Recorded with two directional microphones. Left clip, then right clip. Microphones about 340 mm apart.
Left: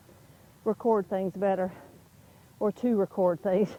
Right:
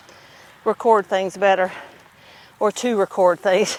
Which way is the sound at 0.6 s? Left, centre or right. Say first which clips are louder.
Right 10 dB; centre.